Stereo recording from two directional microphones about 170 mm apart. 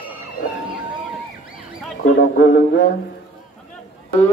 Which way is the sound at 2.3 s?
90° left.